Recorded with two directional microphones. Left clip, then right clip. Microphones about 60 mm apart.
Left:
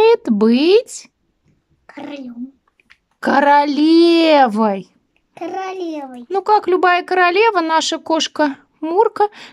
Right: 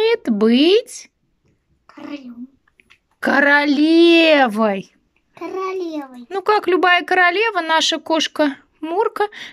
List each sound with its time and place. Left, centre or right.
0.0 s a sound: left
2.8 s speech: left
5.4 s a child's voice: left